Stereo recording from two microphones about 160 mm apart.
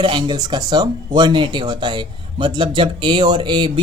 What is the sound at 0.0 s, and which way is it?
Speech, 30° right (ahead or behind).